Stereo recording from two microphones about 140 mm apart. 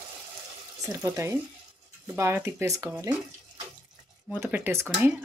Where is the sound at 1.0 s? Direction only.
20° right (ahead or behind).